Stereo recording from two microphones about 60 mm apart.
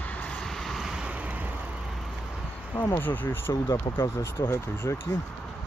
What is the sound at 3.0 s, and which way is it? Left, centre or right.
Speech, left.